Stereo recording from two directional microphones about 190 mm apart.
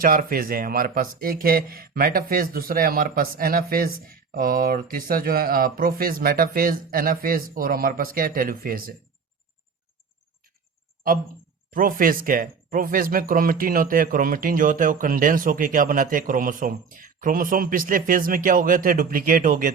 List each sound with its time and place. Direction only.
0.0 s speech: 50° right (ahead or behind)
11.7 s speech: 45° right (ahead or behind)